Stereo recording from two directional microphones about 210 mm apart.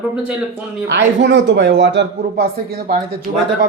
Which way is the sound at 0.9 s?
60° right (ahead or behind).